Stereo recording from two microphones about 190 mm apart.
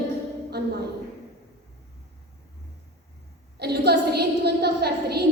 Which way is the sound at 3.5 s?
60° right (ahead or behind).